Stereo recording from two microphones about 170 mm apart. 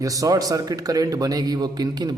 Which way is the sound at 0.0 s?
20° right (ahead or behind).